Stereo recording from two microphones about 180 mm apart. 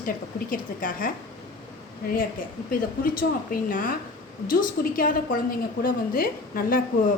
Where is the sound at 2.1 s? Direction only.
55° left (ahead or behind).